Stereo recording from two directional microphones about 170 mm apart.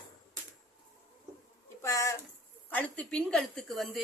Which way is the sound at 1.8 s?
20° left (ahead or behind).